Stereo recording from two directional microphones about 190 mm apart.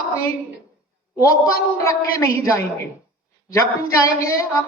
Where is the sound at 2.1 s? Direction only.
15° left (ahead or behind).